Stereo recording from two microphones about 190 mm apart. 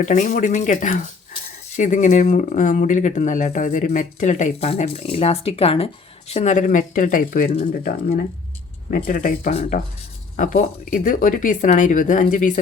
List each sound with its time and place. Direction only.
0.0 s speech: 40° left (ahead or behind)